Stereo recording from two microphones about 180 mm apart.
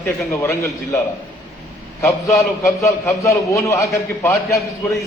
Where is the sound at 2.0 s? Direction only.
15° left (ahead or behind).